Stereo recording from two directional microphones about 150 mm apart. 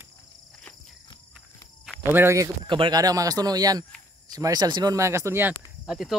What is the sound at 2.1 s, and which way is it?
Speech, 20° right (ahead or behind).